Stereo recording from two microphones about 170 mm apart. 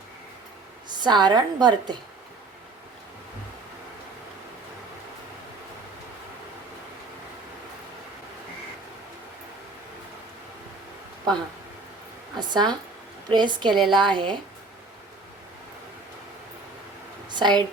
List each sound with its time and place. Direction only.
1.0 s a woman's voice: 25° right (ahead or behind)
12.4 s a woman's voice: 25° right (ahead or behind)
13.7 s a woman's voice: centre (ahead or behind)
14.0 s a woman's voice: 30° right (ahead or behind)
17.3 s speech: 25° right (ahead or behind)